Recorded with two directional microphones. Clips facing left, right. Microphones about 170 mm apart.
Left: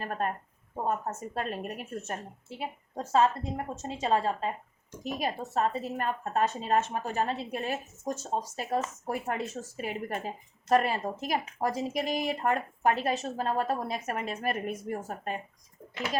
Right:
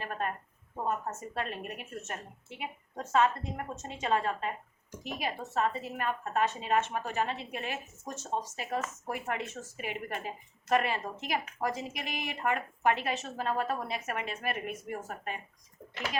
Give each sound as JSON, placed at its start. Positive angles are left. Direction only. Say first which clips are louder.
{"t": 0.0, "sound": "a woman's voice", "louder": "left 3 dB", "side_deg": 40}